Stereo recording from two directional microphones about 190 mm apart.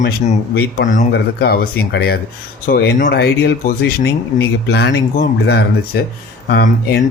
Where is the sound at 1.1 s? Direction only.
55° left (ahead or behind).